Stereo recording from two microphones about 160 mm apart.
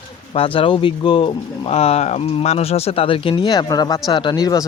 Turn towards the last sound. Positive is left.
turn(degrees=25)  # may be behind; listen again after turning